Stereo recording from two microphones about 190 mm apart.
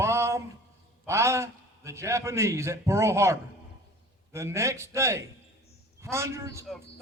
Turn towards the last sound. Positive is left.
turn(degrees=-15)  # may be behind; listen again after turning